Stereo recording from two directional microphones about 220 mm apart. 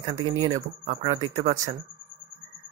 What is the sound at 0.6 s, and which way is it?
Speech, 30° right (ahead or behind).